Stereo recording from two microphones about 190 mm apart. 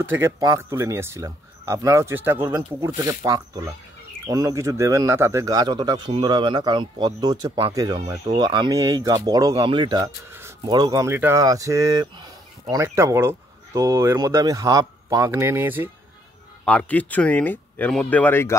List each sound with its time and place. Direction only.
0.0 s speech: 10° right (ahead or behind)
16.6 s speech: 5° left (ahead or behind)